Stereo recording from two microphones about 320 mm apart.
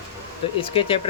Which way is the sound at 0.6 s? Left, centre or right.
Centre.